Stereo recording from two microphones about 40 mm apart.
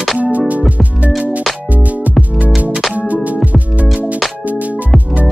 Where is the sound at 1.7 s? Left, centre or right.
Right.